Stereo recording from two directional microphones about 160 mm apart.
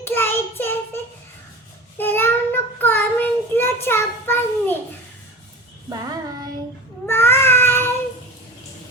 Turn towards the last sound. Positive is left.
turn(degrees=15)  # may be behind; listen again after turning